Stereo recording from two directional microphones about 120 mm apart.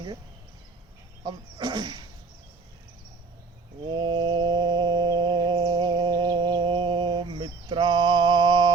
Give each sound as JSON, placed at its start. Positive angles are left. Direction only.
{"t": 1.2, "sound": "speech", "side_deg": -35}
{"t": 3.8, "sound": "mantra", "side_deg": -40}